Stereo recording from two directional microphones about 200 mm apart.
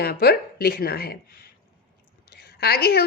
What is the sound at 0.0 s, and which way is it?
A woman's voice, 50° left (ahead or behind).